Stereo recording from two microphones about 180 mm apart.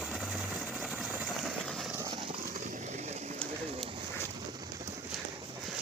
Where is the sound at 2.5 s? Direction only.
40° right (ahead or behind).